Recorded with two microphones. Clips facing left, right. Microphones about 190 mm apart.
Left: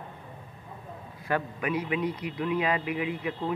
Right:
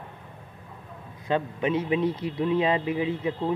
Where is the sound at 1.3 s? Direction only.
25° right (ahead or behind).